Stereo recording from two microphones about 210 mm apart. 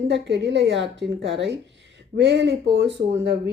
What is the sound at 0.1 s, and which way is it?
Speech, 55° right (ahead or behind).